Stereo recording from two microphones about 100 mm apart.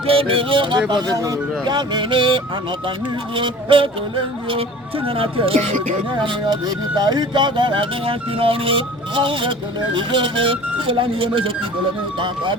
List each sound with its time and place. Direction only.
0.1 s speech: 65° right (ahead or behind)
5.0 s speech: 65° right (ahead or behind)
6.2 s speech: 45° right (ahead or behind); by 11.5 s 60° right (ahead or behind)